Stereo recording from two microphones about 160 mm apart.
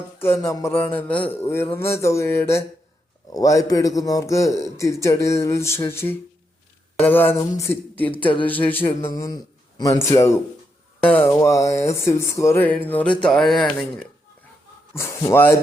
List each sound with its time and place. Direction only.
0.2 s a man's voice: 15° left (ahead or behind)
14.9 s speech: 20° left (ahead or behind)